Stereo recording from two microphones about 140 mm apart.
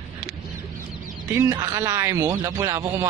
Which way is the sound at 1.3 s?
20° right (ahead or behind).